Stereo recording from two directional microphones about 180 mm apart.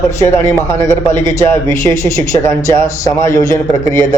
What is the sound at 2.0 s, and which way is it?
A man's voice, 15° left (ahead or behind).